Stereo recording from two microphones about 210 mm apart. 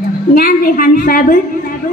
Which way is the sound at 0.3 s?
40° left (ahead or behind).